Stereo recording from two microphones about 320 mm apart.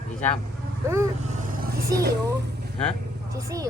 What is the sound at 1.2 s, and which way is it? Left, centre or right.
Vehicle, right.